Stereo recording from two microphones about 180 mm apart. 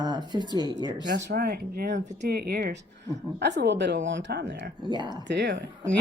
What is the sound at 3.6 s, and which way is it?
Speech, 75° right (ahead or behind).